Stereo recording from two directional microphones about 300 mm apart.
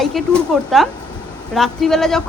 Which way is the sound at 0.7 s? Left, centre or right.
Centre.